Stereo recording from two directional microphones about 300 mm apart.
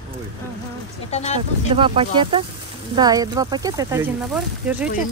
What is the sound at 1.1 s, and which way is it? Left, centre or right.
Speech, left.